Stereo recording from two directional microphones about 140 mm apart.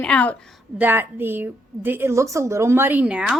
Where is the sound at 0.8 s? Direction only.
15° right (ahead or behind).